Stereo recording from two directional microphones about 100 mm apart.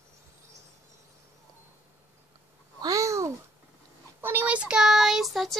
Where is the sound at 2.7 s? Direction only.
35° right (ahead or behind).